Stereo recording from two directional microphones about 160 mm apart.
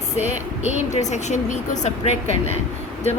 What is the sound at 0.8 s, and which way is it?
A woman's voice, 45° left (ahead or behind).